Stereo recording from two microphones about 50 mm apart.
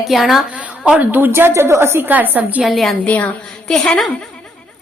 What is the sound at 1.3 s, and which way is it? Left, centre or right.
Speech, right.